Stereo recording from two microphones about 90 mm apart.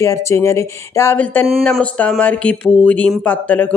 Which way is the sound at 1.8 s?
15° left (ahead or behind).